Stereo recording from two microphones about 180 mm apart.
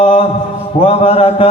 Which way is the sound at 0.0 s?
30° left (ahead or behind).